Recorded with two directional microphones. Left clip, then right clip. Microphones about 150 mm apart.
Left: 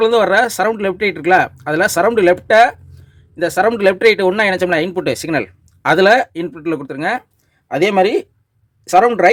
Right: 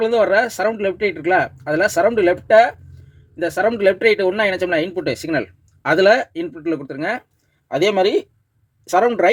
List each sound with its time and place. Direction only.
0.0 s speech: 25° left (ahead or behind)